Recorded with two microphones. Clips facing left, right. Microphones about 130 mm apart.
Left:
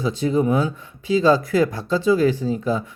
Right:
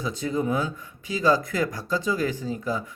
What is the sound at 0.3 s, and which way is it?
Speech, 20° left (ahead or behind).